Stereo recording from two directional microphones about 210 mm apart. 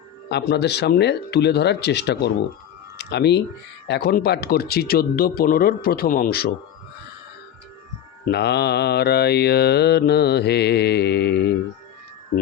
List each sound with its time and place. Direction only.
0.3 s mantra: 50° left (ahead or behind)
3.0 s speech: 55° left (ahead or behind)
3.8 s mantra: 50° left (ahead or behind)
8.2 s mantra: 50° left (ahead or behind)